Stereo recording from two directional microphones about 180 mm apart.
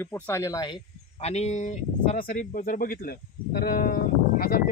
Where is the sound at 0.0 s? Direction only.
15° left (ahead or behind).